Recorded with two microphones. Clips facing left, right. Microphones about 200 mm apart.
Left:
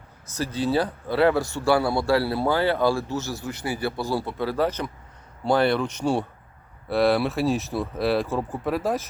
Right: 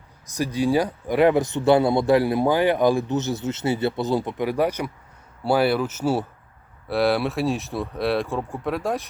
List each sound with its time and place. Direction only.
0.3 s speech: 15° right (ahead or behind); by 9.0 s centre (ahead or behind)